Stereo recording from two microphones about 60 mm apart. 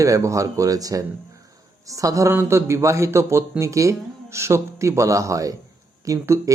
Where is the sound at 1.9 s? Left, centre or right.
Right.